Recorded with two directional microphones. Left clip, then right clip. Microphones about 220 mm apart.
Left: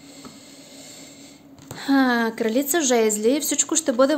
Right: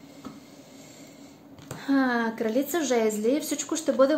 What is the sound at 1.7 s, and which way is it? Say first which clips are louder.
A woman's voice: left 5 dB; 35° left (ahead or behind).